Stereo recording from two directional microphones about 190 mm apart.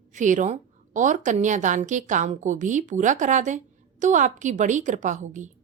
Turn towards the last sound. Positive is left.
turn(degrees=-40)  # may be behind; listen again after turning